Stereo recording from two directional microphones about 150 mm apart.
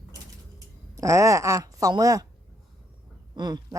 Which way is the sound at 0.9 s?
20° right (ahead or behind).